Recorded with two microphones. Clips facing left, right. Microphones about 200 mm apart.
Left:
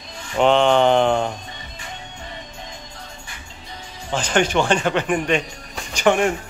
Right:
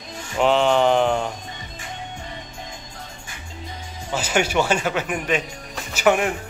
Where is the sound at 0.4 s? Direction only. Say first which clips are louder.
Left 2 dB; 5° right (ahead or behind).